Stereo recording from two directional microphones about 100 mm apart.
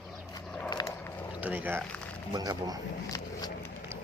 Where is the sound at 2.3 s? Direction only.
40° right (ahead or behind).